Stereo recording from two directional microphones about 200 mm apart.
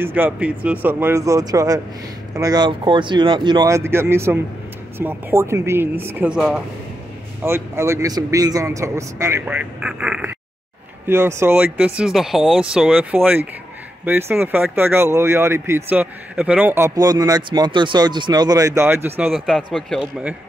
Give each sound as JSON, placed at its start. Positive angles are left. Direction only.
{"t": 0.0, "sound": "a man's voice", "side_deg": -10}
{"t": 19.3, "sound": "a man's voice", "side_deg": 0}